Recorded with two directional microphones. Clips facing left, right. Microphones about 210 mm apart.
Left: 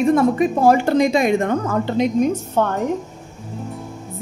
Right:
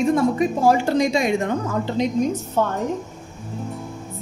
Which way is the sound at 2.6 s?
60° left (ahead or behind).